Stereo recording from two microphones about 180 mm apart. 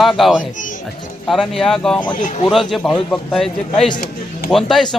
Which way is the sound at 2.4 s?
Centre (ahead or behind).